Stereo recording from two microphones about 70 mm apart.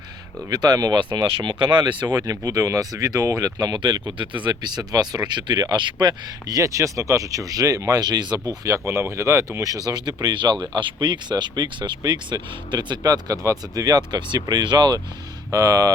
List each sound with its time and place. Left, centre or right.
0.5 s speech: right
1.7 s speech: right
5.3 s speech: right
6.6 s speech: right
8.6 s speech: right
13.0 s speech: right
15.5 s speech: right